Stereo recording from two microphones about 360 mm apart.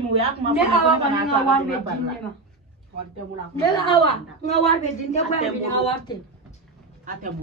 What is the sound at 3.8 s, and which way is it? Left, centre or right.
A woman's voice, centre.